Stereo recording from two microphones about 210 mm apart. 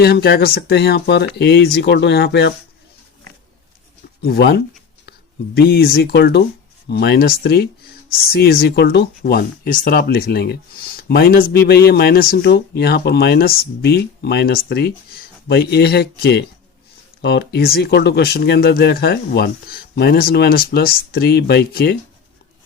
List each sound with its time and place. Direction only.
0.0 s speech: 50° left (ahead or behind)
4.2 s speech: 50° left (ahead or behind)